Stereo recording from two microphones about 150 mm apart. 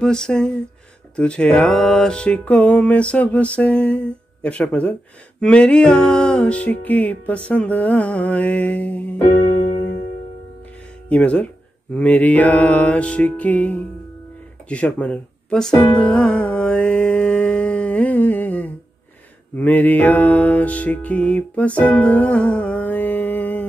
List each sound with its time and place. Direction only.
0.0 s speech: 5° left (ahead or behind)
1.1 s mantra: 5° left (ahead or behind)
11.1 s mantra: 10° left (ahead or behind)
14.7 s music: 10° left (ahead or behind)